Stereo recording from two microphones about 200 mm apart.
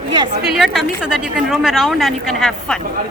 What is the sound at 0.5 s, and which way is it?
A woman's voice, centre (ahead or behind).